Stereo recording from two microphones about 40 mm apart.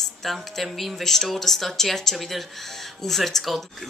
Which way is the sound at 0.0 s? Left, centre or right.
Centre.